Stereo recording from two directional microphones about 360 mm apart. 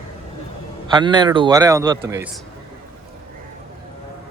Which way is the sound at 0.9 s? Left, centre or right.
Centre.